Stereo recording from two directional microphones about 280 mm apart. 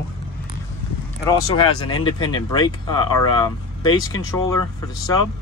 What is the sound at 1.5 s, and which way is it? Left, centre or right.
Speech, centre.